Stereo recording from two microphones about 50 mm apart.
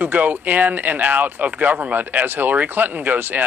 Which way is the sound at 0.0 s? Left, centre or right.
Right.